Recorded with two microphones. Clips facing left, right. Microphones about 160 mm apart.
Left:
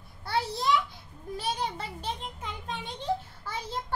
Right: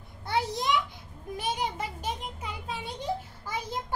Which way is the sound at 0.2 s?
15° right (ahead or behind).